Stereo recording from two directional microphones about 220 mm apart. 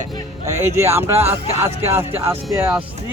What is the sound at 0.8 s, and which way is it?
Speech, 10° right (ahead or behind).